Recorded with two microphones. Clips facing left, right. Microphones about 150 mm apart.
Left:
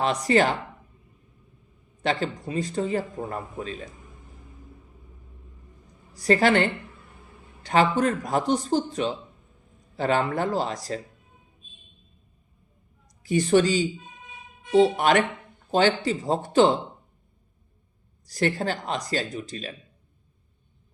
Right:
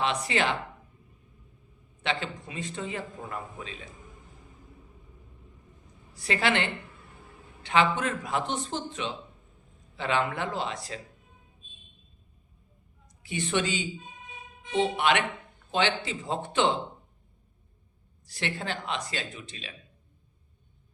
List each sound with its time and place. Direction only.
0.0 s a man's voice: 40° left (ahead or behind)
2.0 s a man's voice: 40° left (ahead or behind)
6.1 s a man's voice: 40° left (ahead or behind)
13.2 s a man's voice: 40° left (ahead or behind)
18.3 s a man's voice: 40° left (ahead or behind)